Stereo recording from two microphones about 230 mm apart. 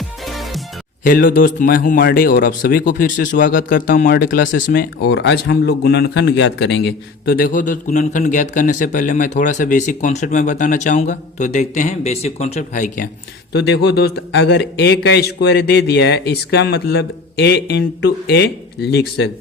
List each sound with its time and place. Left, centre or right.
0.3 s music: centre
1.0 s a man's voice: left
13.5 s a man's voice: left